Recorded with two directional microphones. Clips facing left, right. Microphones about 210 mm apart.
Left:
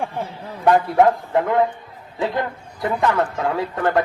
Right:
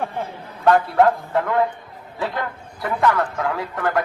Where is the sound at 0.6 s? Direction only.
15° left (ahead or behind).